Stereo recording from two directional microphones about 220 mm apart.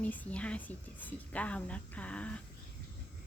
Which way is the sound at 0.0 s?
5° left (ahead or behind).